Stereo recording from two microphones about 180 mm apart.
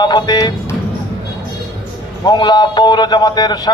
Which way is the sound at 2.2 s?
25° left (ahead or behind).